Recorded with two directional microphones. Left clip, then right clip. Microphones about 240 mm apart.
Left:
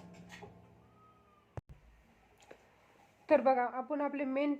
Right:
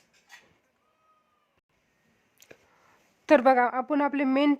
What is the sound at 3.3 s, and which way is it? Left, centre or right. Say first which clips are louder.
A woman's voice: right 8 dB; right.